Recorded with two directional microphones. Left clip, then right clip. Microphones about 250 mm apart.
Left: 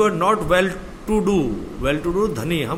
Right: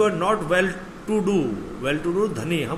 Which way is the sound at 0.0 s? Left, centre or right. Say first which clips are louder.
Left 3 dB; left.